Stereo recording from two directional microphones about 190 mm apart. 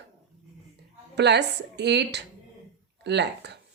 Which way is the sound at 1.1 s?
60° right (ahead or behind).